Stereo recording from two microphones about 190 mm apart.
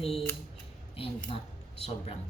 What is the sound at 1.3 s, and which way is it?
Speech, 25° left (ahead or behind).